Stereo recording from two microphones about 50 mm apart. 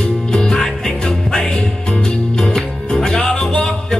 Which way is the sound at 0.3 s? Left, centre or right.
Centre.